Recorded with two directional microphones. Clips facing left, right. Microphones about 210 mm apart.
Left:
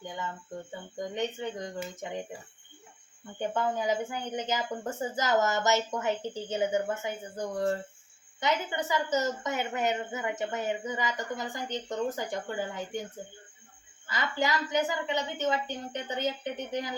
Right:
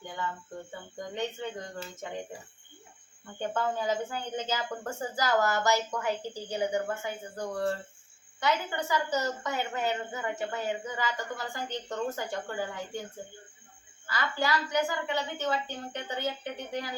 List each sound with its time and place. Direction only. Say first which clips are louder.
0.0 s speech: right 1 dB; 20° left (ahead or behind)
3.3 s a woman's voice: left 1 dB; 15° left (ahead or behind)
14.1 s a woman's voice: even; 20° left (ahead or behind)